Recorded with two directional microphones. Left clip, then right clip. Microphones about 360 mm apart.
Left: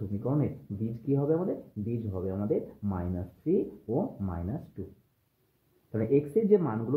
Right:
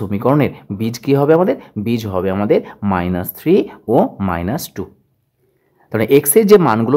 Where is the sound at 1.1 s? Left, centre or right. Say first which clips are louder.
Right 17 dB; right.